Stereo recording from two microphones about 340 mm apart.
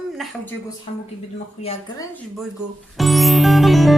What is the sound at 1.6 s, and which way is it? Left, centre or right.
Speech, centre.